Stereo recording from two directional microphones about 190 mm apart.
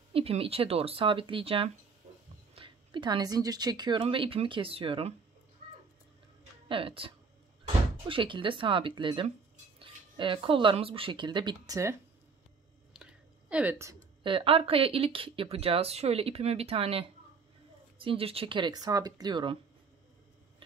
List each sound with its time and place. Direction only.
0.1 s speech: 30° right (ahead or behind)
6.7 s speech: 30° right (ahead or behind)
12.9 s a sound: 5° right (ahead or behind)
14.2 s speech: 30° right (ahead or behind)